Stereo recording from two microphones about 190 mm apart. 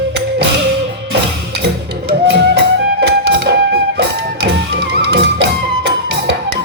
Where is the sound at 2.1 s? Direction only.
60° right (ahead or behind).